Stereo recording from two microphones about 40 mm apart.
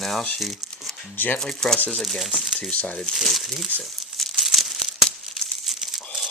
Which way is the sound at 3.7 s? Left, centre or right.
Right.